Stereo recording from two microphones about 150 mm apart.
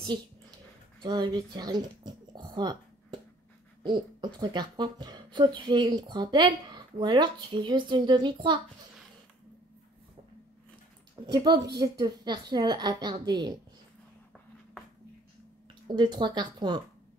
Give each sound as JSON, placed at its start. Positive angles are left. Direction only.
{"t": 0.0, "sound": "a sound", "side_deg": -30}
{"t": 1.0, "sound": "speech", "side_deg": -30}
{"t": 11.2, "sound": "a woman's voice", "side_deg": -25}
{"t": 16.0, "sound": "a woman's voice", "side_deg": -30}